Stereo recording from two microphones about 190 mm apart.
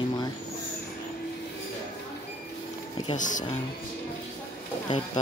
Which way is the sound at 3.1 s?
40° left (ahead or behind).